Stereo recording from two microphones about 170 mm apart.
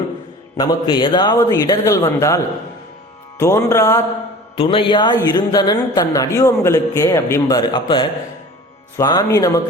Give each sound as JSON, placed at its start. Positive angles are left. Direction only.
{"t": 0.5, "sound": "a woman's voice", "side_deg": 25}
{"t": 3.3, "sound": "music", "side_deg": 15}
{"t": 4.5, "sound": "a woman's voice", "side_deg": 35}